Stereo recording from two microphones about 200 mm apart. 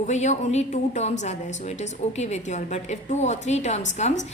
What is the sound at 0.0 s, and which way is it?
A woman's voice, 35° left (ahead or behind).